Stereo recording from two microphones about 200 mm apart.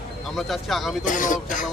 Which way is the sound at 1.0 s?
40° left (ahead or behind).